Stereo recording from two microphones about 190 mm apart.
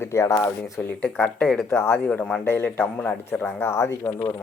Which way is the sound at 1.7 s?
10° left (ahead or behind).